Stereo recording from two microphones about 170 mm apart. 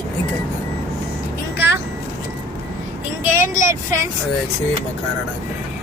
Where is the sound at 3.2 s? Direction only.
15° right (ahead or behind).